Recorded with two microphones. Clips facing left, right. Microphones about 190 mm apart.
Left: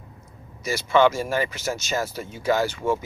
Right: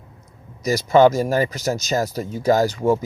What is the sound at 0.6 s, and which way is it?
Speech, 40° right (ahead or behind).